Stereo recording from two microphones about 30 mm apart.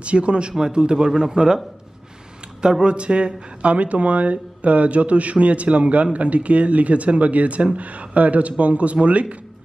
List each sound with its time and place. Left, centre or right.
0.0 s a man's voice: right
0.9 s a man's voice: centre
2.8 s speech: right
3.7 s speech: right